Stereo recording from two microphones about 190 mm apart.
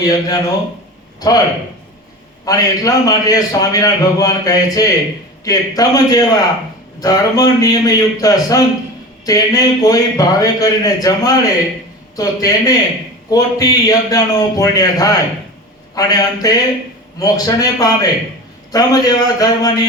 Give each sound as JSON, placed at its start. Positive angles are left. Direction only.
{"t": 0.0, "sound": "a man's voice", "side_deg": 20}
{"t": 2.4, "sound": "a man's voice", "side_deg": 20}